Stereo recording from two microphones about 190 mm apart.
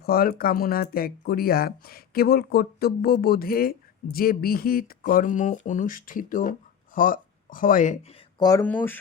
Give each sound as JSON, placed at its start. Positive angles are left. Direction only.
{"t": 0.0, "sound": "speech", "side_deg": 55}
{"t": 8.4, "sound": "speech", "side_deg": 20}
{"t": 8.6, "sound": "speech", "side_deg": 10}